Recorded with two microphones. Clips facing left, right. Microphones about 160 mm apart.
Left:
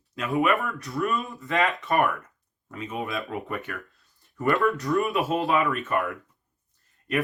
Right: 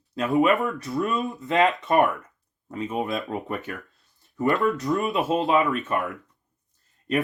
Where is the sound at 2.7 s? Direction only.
30° right (ahead or behind).